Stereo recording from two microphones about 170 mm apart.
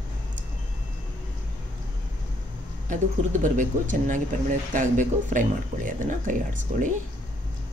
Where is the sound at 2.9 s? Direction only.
50° right (ahead or behind).